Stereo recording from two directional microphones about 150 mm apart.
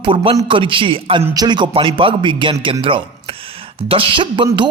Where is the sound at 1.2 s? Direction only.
25° right (ahead or behind).